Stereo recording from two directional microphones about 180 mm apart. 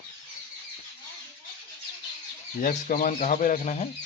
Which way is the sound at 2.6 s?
50° left (ahead or behind).